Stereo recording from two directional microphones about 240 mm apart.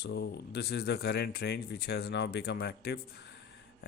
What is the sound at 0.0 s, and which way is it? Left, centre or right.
Speech, left.